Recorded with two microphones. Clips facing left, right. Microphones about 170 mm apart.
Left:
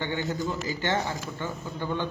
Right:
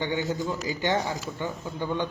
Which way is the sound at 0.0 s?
15° right (ahead or behind).